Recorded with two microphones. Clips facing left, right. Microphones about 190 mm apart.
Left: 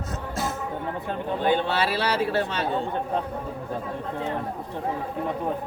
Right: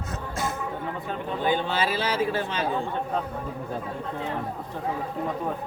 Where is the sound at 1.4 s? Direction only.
65° left (ahead or behind).